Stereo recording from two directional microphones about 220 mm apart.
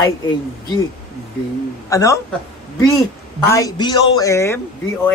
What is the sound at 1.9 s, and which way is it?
Speech, 15° left (ahead or behind).